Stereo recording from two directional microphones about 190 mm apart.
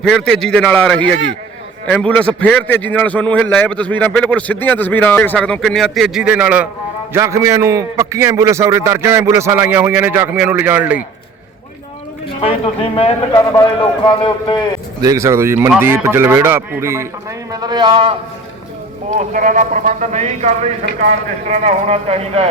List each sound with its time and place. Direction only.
0.0 s a man's voice: centre (ahead or behind)
12.4 s a man's voice: 30° left (ahead or behind)
15.0 s a man's voice: 15° right (ahead or behind)
19.1 s speech: 45° right (ahead or behind)